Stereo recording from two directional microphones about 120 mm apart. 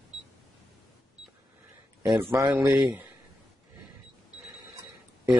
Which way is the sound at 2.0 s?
25° right (ahead or behind).